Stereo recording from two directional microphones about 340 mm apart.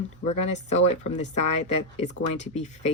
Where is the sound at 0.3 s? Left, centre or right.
Left.